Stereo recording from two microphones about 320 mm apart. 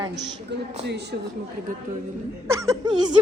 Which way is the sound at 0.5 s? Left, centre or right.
Right.